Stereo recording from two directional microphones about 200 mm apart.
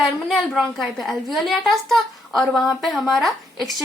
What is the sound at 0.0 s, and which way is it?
A woman's voice, centre (ahead or behind).